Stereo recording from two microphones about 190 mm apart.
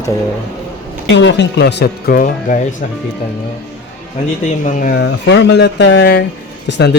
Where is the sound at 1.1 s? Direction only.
70° left (ahead or behind); by 2.6 s 45° left (ahead or behind).